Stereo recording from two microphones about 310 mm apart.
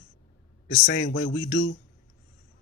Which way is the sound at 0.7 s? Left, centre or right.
Left.